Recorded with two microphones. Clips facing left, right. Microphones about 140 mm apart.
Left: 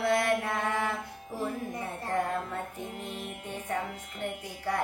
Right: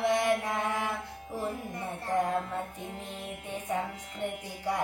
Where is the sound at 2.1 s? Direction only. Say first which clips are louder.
Right 2 dB; 15° right (ahead or behind).